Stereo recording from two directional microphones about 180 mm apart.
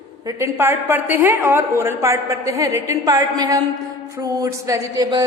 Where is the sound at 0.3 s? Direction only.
15° right (ahead or behind).